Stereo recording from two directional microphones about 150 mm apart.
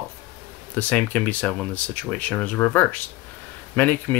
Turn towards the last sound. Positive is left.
turn(degrees=10)  # may be behind; listen again after turning